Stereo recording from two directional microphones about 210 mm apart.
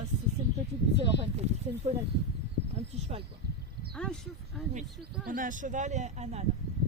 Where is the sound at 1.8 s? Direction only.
30° right (ahead or behind).